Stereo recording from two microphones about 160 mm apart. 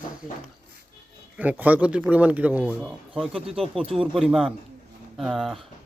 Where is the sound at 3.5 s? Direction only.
35° right (ahead or behind).